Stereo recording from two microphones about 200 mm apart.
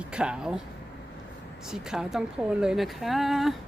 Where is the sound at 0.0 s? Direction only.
5° right (ahead or behind).